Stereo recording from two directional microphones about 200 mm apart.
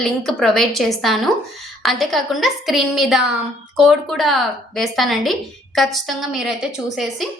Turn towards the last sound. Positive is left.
turn(degrees=0)  # may be behind; listen again after turning